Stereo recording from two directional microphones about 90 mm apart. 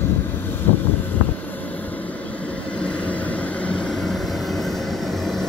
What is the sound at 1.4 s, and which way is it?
Vehicle, 20° left (ahead or behind).